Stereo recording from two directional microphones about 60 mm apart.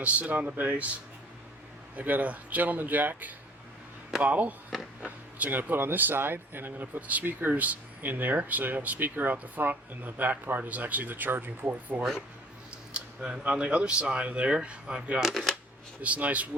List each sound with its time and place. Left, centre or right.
0.0 s speech: right
2.0 s speech: right
12.9 s speech: centre
15.2 s speech: centre
16.0 s speech: right